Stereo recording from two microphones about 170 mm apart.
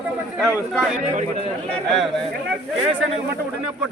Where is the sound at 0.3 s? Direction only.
Centre (ahead or behind).